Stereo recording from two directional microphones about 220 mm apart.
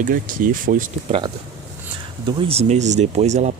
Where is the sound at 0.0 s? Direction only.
40° right (ahead or behind).